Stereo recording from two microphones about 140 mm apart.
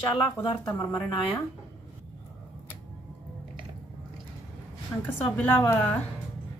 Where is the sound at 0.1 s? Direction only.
35° left (ahead or behind).